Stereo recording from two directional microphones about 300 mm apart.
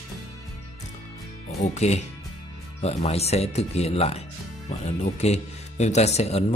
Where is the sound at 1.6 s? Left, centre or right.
Left.